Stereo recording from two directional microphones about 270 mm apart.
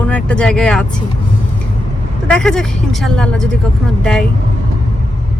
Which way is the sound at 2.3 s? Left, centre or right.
Centre.